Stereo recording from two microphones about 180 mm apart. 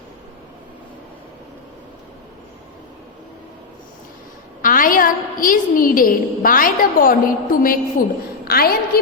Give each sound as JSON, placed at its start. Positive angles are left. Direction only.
{"t": 4.6, "sound": "a woman's voice", "side_deg": 50}